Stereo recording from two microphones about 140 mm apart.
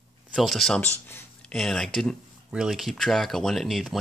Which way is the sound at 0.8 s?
15° left (ahead or behind).